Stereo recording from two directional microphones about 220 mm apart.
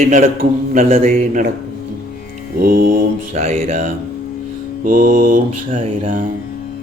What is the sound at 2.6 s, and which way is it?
Mantra, 40° right (ahead or behind).